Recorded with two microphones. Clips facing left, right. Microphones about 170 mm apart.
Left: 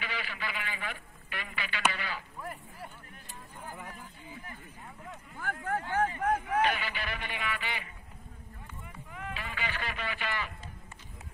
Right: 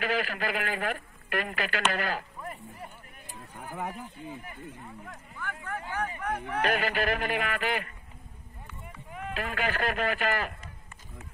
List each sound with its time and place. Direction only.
0.1 s speech: 45° right (ahead or behind)
2.4 s a sound: centre (ahead or behind)
3.5 s speech: 70° right (ahead or behind)
5.4 s a sound: 45° left (ahead or behind)
6.6 s speech: 50° right (ahead or behind)
9.4 s speech: 50° right (ahead or behind)